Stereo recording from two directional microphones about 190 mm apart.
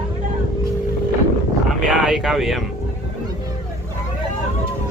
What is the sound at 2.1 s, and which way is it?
Speech, centre (ahead or behind).